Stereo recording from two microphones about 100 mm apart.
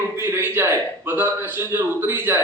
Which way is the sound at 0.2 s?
25° right (ahead or behind).